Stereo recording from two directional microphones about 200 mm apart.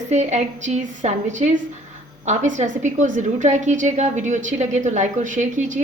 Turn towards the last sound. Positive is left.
turn(degrees=-40)  # may be behind; listen again after turning